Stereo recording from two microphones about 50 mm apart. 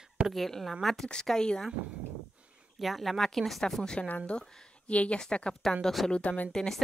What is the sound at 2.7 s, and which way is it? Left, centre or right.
A woman's voice, centre.